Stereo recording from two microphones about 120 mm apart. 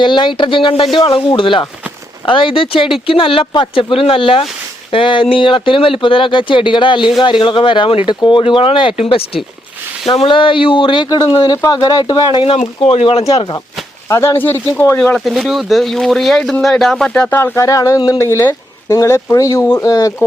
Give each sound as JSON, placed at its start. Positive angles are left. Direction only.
{"t": 0.0, "sound": "speech", "side_deg": 40}
{"t": 14.1, "sound": "speech", "side_deg": 25}
{"t": 15.2, "sound": "speech", "side_deg": 0}
{"t": 17.3, "sound": "speech", "side_deg": 20}